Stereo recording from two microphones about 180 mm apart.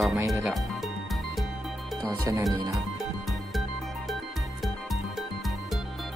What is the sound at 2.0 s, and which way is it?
Speech, 20° right (ahead or behind).